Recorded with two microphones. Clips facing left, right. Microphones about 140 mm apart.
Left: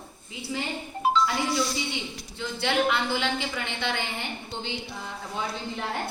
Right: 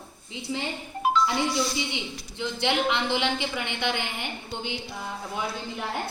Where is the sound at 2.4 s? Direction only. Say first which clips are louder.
Even; 20° right (ahead or behind).